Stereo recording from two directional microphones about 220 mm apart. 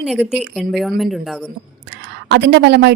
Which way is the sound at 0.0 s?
5° right (ahead or behind).